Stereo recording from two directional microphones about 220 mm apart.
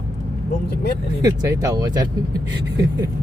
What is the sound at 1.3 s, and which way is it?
Speech, 15° right (ahead or behind).